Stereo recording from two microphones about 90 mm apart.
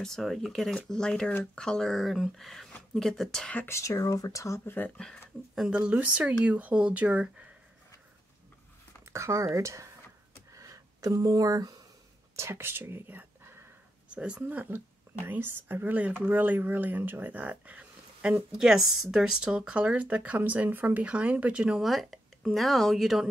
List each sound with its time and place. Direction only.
0.0 s speech: 5° left (ahead or behind)
3.6 s speech: 35° left (ahead or behind)
4.9 s speech: 5° left (ahead or behind)
5.5 s speech: 10° right (ahead or behind)
9.0 s speech: 35° right (ahead or behind)
10.5 s a sound: 35° right (ahead or behind)
12.4 s speech: 30° right (ahead or behind); by 21.8 s 10° right (ahead or behind)
21.8 s speech: centre (ahead or behind)